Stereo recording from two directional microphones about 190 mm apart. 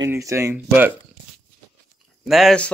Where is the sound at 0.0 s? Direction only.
15° right (ahead or behind).